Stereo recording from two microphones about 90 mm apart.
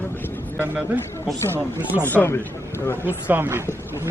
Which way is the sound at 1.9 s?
20° left (ahead or behind).